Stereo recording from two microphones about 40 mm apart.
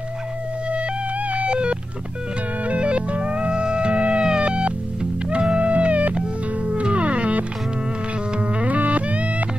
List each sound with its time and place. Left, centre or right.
1.3 s music: right
8.5 s music: right